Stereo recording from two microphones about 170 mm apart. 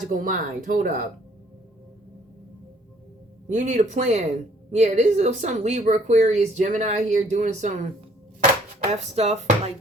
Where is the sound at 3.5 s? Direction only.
45° right (ahead or behind).